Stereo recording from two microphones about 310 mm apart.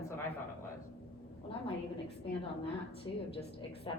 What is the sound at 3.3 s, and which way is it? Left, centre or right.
Speech, centre.